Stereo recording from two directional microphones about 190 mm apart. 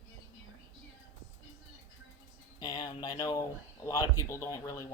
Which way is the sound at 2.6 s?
20° left (ahead or behind).